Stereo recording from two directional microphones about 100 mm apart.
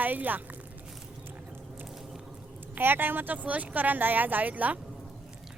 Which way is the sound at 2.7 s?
20° right (ahead or behind).